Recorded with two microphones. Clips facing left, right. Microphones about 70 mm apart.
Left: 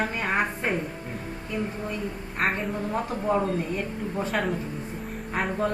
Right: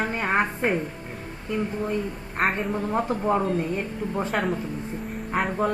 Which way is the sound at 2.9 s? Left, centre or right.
Right.